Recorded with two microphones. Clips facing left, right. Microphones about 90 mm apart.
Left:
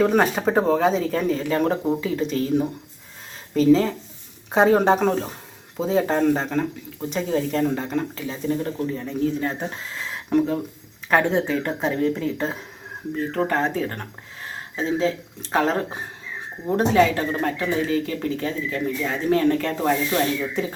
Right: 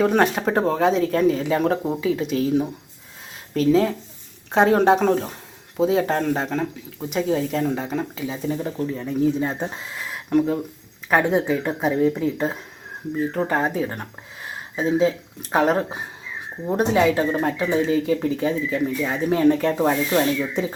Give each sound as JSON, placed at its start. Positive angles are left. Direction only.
{"t": 0.0, "sound": "speech", "side_deg": 0}
{"t": 10.1, "sound": "a sound", "side_deg": 0}
{"t": 11.1, "sound": "speech", "side_deg": -10}